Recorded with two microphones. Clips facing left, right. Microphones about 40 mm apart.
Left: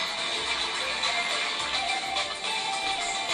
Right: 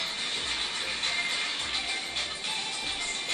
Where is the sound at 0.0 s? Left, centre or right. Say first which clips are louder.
Left 3 dB; left.